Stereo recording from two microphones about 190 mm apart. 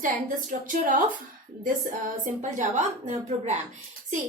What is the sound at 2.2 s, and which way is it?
A woman's voice, 40° right (ahead or behind).